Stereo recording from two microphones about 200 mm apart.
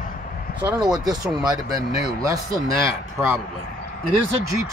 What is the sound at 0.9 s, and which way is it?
Speech, 20° right (ahead or behind).